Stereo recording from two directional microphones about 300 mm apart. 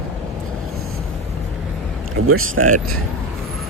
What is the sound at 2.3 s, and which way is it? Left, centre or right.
Speech, right.